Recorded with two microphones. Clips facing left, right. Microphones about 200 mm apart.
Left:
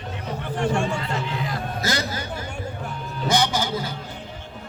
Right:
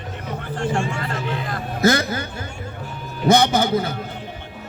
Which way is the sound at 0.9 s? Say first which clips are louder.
Right 1 dB; 55° right (ahead or behind).